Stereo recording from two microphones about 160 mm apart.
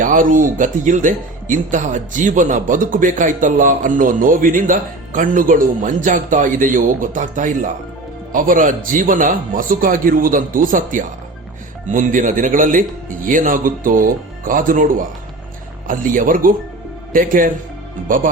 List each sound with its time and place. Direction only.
0.0 s speech: 55° right (ahead or behind)